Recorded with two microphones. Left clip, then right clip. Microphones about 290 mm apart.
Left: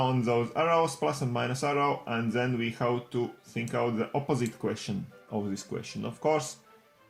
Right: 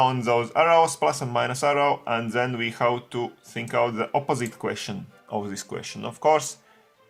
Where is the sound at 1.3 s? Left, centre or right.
Right.